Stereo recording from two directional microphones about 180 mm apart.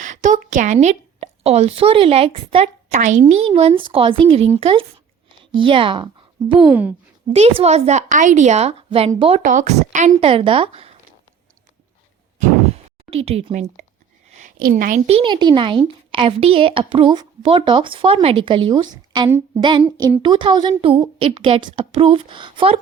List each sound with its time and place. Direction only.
0.0 s a woman's voice: 45° right (ahead or behind); by 6.1 s 30° right (ahead or behind)
6.7 s speech: 10° right (ahead or behind)
7.6 s speech: 40° right (ahead or behind)
9.4 s speech: 45° right (ahead or behind)
12.4 s a sound: 35° right (ahead or behind)
14.4 s a woman's voice: 50° right (ahead or behind)
15.0 s a woman's voice: 30° right (ahead or behind)